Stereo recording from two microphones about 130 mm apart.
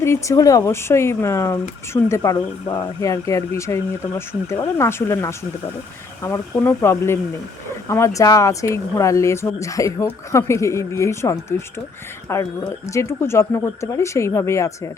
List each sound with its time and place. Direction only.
0.0 s speech: 20° left (ahead or behind)